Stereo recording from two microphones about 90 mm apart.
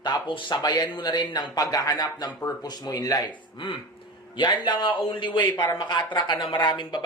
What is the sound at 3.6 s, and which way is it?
Speech, 70° left (ahead or behind).